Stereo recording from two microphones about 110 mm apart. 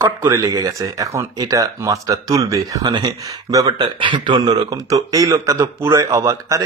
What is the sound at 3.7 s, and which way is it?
Speech, 45° right (ahead or behind).